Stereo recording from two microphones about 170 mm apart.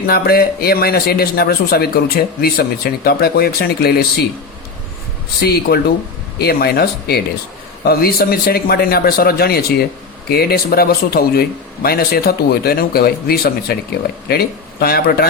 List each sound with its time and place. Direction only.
0.1 s a man's voice: 65° left (ahead or behind)
5.4 s a man's voice: 65° left (ahead or behind)